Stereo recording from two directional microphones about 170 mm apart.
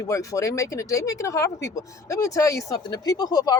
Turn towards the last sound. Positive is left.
turn(degrees=25)  # may be behind; listen again after turning